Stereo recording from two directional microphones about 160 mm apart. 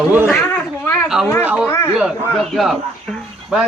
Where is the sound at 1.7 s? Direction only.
15° left (ahead or behind).